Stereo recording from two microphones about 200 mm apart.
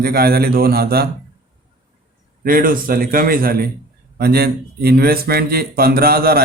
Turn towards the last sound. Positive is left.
turn(degrees=-50)  # may be behind; listen again after turning